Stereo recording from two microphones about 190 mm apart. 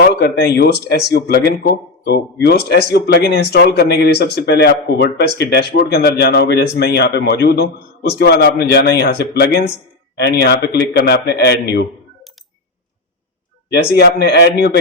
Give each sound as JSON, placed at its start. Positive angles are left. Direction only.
{"t": 0.1, "sound": "speech", "side_deg": 60}
{"t": 13.7, "sound": "speech", "side_deg": 60}